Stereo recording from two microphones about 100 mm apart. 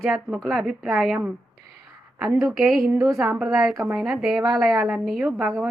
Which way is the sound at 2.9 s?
35° right (ahead or behind).